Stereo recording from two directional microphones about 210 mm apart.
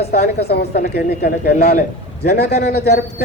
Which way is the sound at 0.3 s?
50° left (ahead or behind).